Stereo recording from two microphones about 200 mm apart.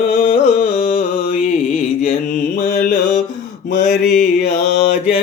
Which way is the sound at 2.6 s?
55° left (ahead or behind).